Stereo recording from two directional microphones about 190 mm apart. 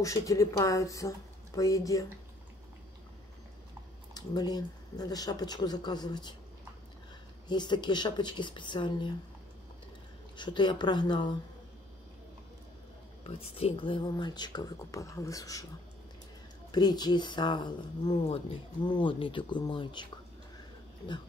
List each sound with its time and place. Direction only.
0.0 s speech: 15° left (ahead or behind)
4.1 s speech: 20° left (ahead or behind)
7.4 s speech: 25° left (ahead or behind)
10.3 s speech: 25° left (ahead or behind)
13.3 s speech: 30° left (ahead or behind)
16.7 s speech: 20° left (ahead or behind)